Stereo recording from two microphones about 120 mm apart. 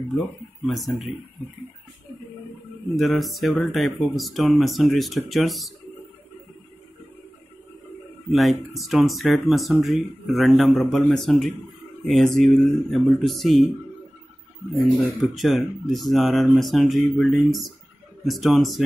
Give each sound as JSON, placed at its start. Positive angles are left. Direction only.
{"t": 0.7, "sound": "speech", "side_deg": 0}
{"t": 3.0, "sound": "speech", "side_deg": 0}
{"t": 8.3, "sound": "speech", "side_deg": 0}
{"t": 15.0, "sound": "speech", "side_deg": 0}